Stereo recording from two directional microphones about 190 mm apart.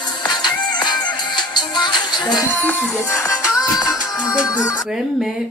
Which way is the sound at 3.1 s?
15° left (ahead or behind).